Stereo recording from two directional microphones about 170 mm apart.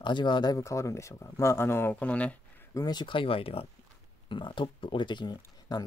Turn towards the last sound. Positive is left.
turn(degrees=25)  # may be behind; listen again after turning